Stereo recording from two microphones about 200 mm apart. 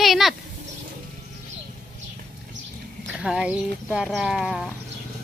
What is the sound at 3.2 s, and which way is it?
A woman's voice, 5° right (ahead or behind).